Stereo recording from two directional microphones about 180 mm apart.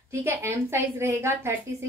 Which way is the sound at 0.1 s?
10° right (ahead or behind).